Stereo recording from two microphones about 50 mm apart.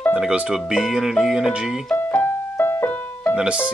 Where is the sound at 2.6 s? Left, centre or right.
Left.